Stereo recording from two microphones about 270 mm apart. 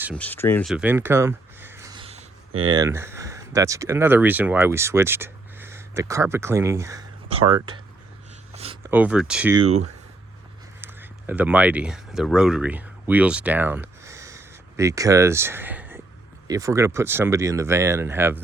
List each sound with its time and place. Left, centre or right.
0.1 s speech: centre
8.5 s a sound: right
8.9 s speech: centre
9.6 s speech: right
10.8 s speech: centre